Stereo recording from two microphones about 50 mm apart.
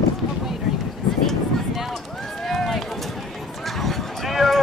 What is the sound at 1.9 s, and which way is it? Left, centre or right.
Run, centre.